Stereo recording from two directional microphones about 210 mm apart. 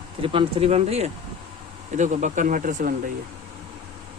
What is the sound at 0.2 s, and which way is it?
Speech, 25° right (ahead or behind).